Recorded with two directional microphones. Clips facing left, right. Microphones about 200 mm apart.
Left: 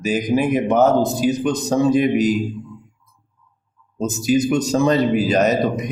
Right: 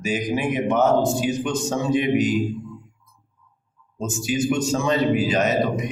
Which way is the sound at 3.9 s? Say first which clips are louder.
Left 6 dB; 40° left (ahead or behind).